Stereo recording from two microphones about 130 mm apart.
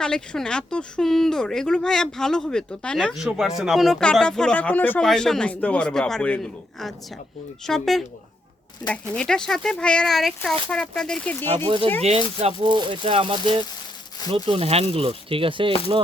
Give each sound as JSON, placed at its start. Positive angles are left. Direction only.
{"t": 0.0, "sound": "speech", "side_deg": 5}
{"t": 12.0, "sound": "speech", "side_deg": -55}
{"t": 12.6, "sound": "speech", "side_deg": -40}
{"t": 14.4, "sound": "speech", "side_deg": -50}